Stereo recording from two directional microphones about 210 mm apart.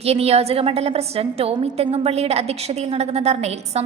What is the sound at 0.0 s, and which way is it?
A woman's voice, 30° right (ahead or behind).